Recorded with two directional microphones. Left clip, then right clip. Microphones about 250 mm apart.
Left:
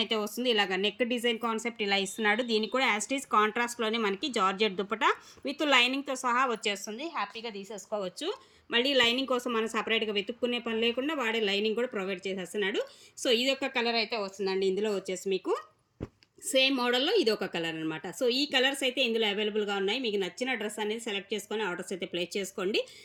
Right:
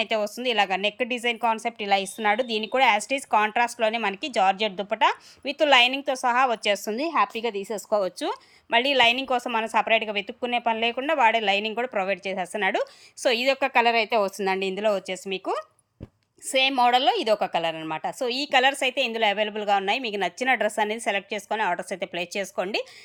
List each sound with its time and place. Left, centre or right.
0.0 s a woman's voice: centre
7.7 s speech: right
8.0 s speech: centre
14.0 s speech: right
14.4 s a woman's voice: centre